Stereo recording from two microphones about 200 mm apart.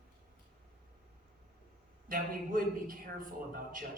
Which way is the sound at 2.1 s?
45° right (ahead or behind).